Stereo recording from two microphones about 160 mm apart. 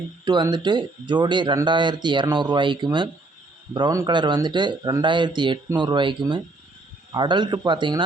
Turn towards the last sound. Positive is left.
turn(degrees=-30)  # may be behind; listen again after turning